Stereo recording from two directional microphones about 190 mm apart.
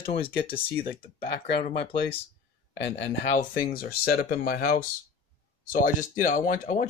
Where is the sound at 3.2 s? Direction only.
40° left (ahead or behind).